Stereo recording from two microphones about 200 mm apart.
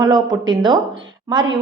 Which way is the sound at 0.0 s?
20° right (ahead or behind).